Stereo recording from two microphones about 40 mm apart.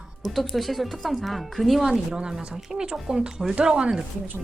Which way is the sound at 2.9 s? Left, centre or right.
Centre.